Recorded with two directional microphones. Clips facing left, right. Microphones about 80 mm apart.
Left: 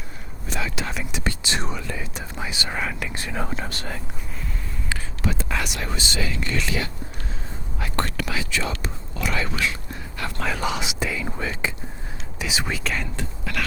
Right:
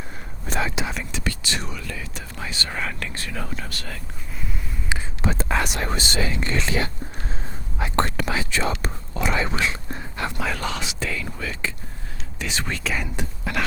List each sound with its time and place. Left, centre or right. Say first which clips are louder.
0.4 s whispering: right 3 dB; right
1.1 s speech: left 1 dB; left
5.2 s speech: right 3 dB; right
6.3 s speech: right 2 dB; right
7.8 s whispering: right 4 dB; right
10.6 s speech: left 2 dB; centre
11.3 s speech: left 2 dB; left
12.4 s speech: left 1 dB; centre
12.8 s speech: right 1 dB; centre
13.1 s speech: right 2 dB; right